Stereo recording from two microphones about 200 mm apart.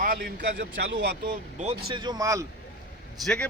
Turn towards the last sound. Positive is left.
turn(degrees=5)  # may be behind; listen again after turning